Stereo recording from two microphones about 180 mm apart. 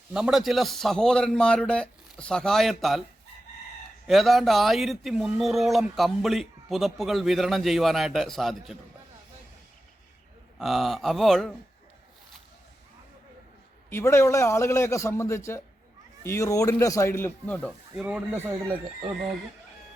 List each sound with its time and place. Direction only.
0.1 s speech: 5° right (ahead or behind)
4.0 s speech: centre (ahead or behind)
10.6 s speech: centre (ahead or behind)
13.9 s a man's voice: 15° left (ahead or behind)
18.0 s speech: 10° right (ahead or behind)